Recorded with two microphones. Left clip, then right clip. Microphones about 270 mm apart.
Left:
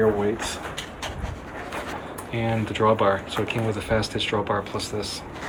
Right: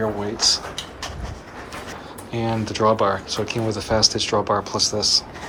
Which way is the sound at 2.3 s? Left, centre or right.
Centre.